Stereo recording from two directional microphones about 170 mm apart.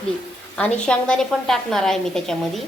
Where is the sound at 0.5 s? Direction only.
5° left (ahead or behind).